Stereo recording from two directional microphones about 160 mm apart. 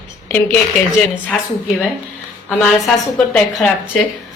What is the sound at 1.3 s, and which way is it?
Speech, 5° left (ahead or behind).